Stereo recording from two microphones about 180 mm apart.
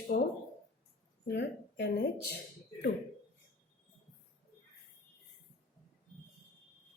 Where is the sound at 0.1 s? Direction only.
50° left (ahead or behind).